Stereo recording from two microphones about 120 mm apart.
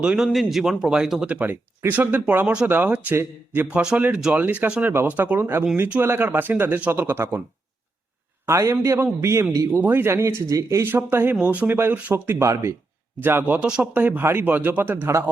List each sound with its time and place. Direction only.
0.0 s speech: 5° right (ahead or behind)
8.4 s speech: 25° right (ahead or behind)
13.5 s speech: 10° right (ahead or behind)